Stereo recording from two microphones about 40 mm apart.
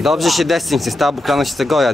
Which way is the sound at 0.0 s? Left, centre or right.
Centre.